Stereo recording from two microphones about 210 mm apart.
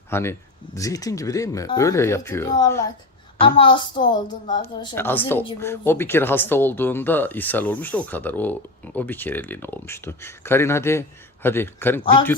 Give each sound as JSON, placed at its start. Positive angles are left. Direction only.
{"t": 0.1, "sound": "speech", "side_deg": 10}
{"t": 3.3, "sound": "a woman's voice", "side_deg": 25}
{"t": 4.9, "sound": "speech", "side_deg": 10}